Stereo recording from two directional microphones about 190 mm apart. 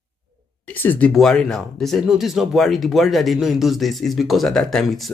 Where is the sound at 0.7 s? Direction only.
10° left (ahead or behind).